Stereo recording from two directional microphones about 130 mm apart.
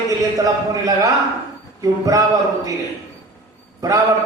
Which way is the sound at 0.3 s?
25° right (ahead or behind).